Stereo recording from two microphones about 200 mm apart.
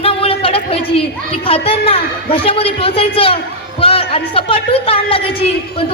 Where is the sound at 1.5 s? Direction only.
25° left (ahead or behind).